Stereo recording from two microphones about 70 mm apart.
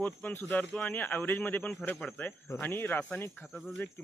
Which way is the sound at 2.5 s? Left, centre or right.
Left.